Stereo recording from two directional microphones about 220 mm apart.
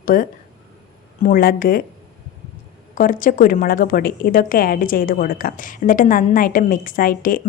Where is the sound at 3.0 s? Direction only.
40° left (ahead or behind).